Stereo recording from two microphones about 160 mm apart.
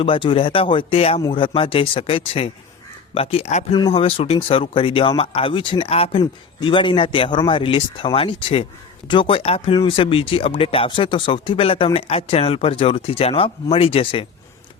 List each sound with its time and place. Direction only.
0.0 s speech: 35° left (ahead or behind)